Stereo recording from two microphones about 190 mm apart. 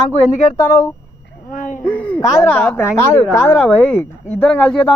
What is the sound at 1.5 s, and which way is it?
Speech, 45° left (ahead or behind).